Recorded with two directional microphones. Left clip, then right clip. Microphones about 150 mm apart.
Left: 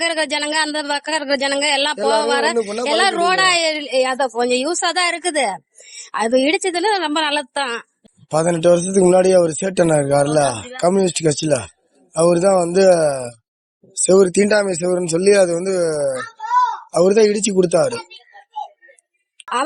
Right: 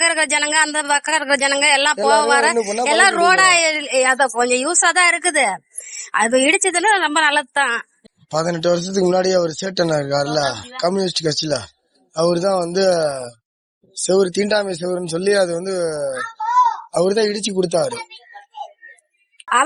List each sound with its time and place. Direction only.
0.0 s a man's voice: 30° left (ahead or behind)
8.3 s speech: 90° left